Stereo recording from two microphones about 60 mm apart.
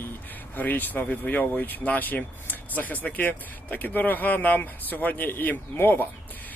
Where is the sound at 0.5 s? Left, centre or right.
Left.